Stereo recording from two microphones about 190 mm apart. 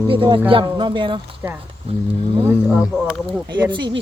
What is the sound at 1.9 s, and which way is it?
Speech, 30° right (ahead or behind).